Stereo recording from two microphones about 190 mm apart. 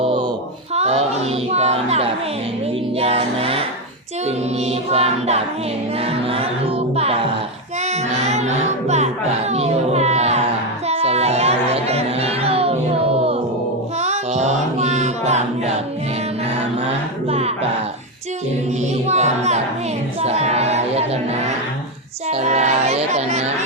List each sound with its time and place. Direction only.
0.0 s a sound: 30° right (ahead or behind)
3.0 s music: 30° right (ahead or behind)
10.8 s a sound: 35° right (ahead or behind)
13.1 s music: 30° right (ahead or behind)
17.2 s music: 35° right (ahead or behind)
19.0 s music: 35° right (ahead or behind)
20.2 s speech: 35° right (ahead or behind)
22.3 s music: 35° right (ahead or behind)